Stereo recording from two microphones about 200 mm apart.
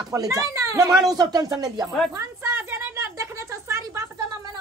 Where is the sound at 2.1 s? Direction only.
15° right (ahead or behind).